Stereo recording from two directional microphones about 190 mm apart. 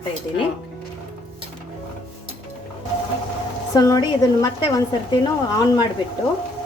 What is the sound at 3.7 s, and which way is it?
A woman's voice, 20° left (ahead or behind).